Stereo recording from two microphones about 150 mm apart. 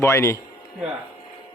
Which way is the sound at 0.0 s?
15° left (ahead or behind).